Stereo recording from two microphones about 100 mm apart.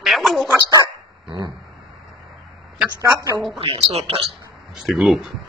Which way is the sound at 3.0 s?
30° right (ahead or behind).